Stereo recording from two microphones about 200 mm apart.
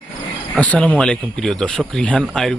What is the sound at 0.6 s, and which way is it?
Speech, 5° left (ahead or behind).